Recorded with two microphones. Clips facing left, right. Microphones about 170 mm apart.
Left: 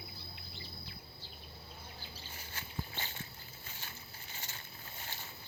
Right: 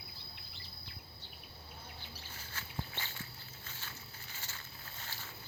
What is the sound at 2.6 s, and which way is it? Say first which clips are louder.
Walk: even; 15° left (ahead or behind).